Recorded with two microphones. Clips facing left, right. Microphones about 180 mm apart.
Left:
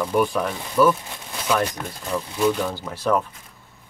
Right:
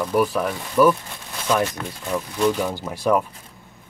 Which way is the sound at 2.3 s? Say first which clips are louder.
Even; 5° left (ahead or behind).